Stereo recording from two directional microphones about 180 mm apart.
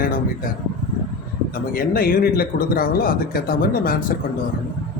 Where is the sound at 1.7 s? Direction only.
55° left (ahead or behind).